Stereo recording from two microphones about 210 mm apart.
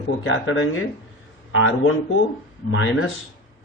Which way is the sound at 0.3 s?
70° left (ahead or behind).